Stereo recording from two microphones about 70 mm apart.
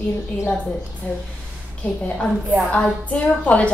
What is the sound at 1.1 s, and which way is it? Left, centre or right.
Speech, left.